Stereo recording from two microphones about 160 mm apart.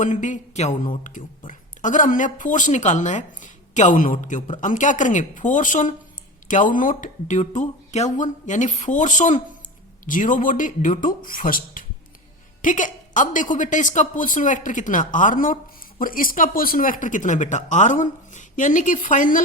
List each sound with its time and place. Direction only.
0.0 s a woman's voice: 50° left (ahead or behind)